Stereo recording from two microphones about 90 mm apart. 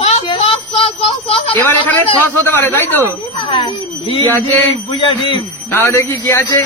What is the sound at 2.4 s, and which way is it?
Speech, 25° left (ahead or behind).